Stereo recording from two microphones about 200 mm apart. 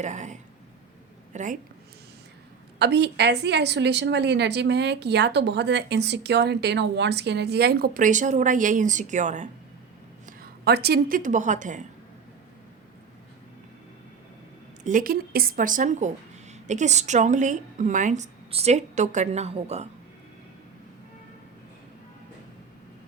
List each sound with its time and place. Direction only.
0.0 s a woman's voice: 35° right (ahead or behind)
2.7 s a woman's voice: 55° right (ahead or behind); by 9.5 s 35° right (ahead or behind)
10.2 s a woman's voice: 50° right (ahead or behind)
14.8 s speech: 45° right (ahead or behind)